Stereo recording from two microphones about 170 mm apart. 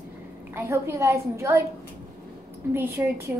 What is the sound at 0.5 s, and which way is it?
A woman's voice, 15° right (ahead or behind).